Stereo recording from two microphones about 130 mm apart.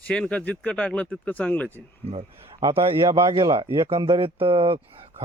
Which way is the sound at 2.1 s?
45° right (ahead or behind).